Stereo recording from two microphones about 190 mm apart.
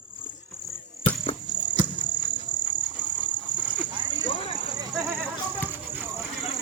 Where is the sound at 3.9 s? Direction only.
25° right (ahead or behind).